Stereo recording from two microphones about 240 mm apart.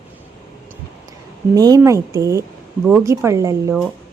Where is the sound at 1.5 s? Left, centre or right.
Centre.